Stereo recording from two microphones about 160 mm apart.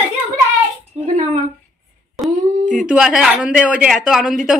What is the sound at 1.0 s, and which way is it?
Speech, 45° right (ahead or behind).